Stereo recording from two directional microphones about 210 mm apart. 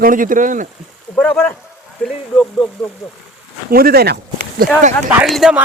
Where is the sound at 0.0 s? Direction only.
40° right (ahead or behind).